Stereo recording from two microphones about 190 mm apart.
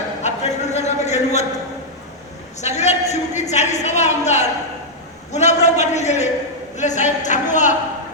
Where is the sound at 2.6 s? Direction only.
35° left (ahead or behind).